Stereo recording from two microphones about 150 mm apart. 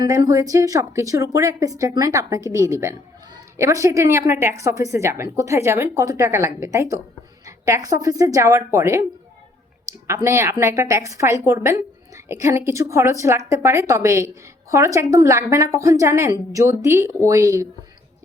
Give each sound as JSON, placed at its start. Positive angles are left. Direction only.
{"t": 0.0, "sound": "a woman's voice", "side_deg": -25}
{"t": 10.1, "sound": "a woman's voice", "side_deg": -20}